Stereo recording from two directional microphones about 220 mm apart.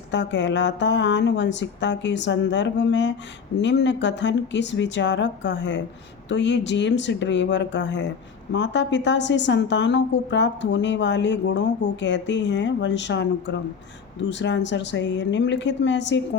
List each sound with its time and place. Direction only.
0.1 s a woman's voice: 55° left (ahead or behind)